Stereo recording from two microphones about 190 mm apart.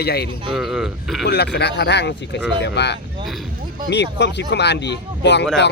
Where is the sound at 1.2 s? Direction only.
60° left (ahead or behind).